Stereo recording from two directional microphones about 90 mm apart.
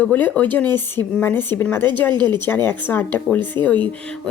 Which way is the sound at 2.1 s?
55° right (ahead or behind).